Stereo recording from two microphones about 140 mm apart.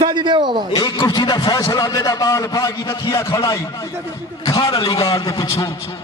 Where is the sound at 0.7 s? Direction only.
30° left (ahead or behind).